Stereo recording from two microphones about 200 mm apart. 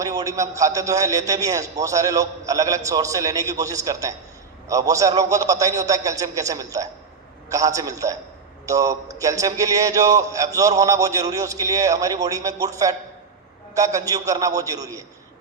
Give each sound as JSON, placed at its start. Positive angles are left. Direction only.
{"t": 0.0, "sound": "a man's voice", "side_deg": -15}